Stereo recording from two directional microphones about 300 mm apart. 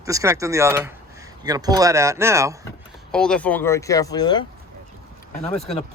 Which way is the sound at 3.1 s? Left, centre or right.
Centre.